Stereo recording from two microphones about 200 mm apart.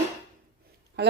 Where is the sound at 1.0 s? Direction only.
55° right (ahead or behind).